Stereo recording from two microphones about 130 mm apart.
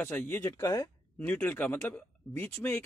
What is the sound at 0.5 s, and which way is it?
Speech, 25° left (ahead or behind).